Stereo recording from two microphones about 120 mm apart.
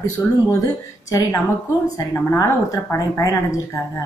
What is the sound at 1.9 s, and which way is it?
A woman's voice, 30° left (ahead or behind).